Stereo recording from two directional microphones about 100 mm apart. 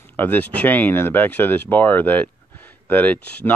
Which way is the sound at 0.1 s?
20° left (ahead or behind).